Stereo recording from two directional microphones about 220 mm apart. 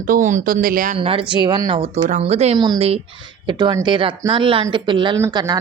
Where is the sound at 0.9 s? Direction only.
25° right (ahead or behind).